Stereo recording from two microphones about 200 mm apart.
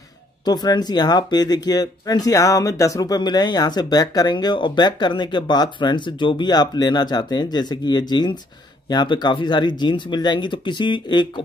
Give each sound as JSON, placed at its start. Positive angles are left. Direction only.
{"t": 0.5, "sound": "speech", "side_deg": 20}